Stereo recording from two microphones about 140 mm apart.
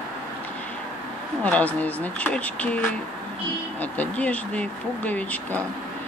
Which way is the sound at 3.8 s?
10° left (ahead or behind).